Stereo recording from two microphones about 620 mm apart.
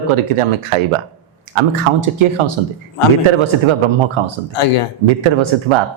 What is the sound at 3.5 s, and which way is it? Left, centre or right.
Speech, right.